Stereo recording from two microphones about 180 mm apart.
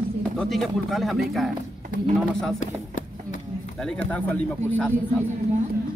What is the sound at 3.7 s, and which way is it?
Speech, 5° left (ahead or behind).